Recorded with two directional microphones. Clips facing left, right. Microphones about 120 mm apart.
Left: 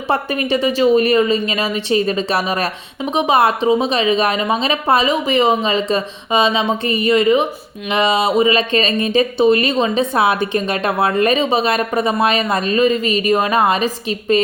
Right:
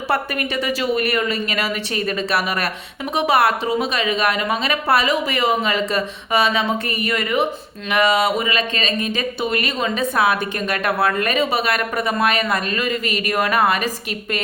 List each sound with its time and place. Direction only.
0.1 s a woman's voice: 25° left (ahead or behind)